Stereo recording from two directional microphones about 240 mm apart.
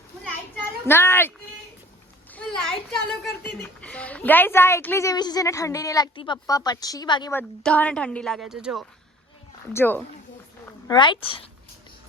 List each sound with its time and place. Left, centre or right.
0.5 s a sound: centre
2.3 s a child's voice: centre
10.8 s speech: centre